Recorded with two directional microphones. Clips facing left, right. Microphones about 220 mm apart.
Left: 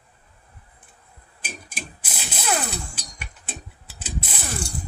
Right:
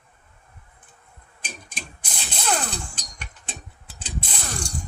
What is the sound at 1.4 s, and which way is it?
Music, 5° left (ahead or behind).